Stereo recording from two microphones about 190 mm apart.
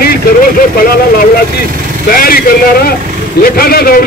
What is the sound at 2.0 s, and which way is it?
A man's voice, 50° left (ahead or behind).